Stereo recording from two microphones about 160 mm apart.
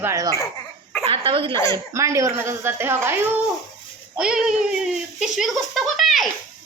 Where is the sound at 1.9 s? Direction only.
20° right (ahead or behind).